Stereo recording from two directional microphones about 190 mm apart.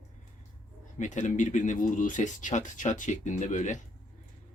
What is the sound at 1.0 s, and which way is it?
Speech, 40° left (ahead or behind).